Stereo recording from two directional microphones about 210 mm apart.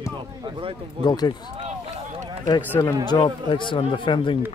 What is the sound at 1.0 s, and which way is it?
Speech, 20° left (ahead or behind).